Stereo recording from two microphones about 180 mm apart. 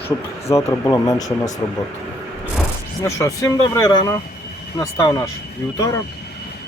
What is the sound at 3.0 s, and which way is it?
Speech, 20° left (ahead or behind).